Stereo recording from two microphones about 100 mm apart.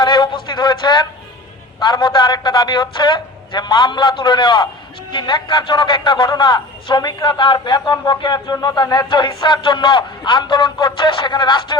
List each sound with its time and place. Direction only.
0.0 s a man's voice: 50° left (ahead or behind)